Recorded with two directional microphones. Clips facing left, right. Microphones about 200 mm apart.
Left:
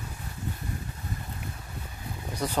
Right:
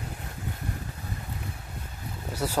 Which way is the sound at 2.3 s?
5° right (ahead or behind).